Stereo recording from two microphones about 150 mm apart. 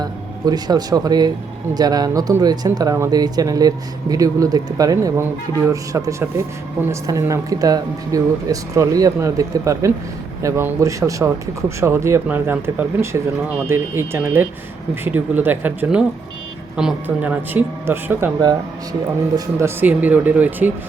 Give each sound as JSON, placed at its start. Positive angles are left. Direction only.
{"t": 0.0, "sound": "speech", "side_deg": -25}
{"t": 19.5, "sound": "speech", "side_deg": -15}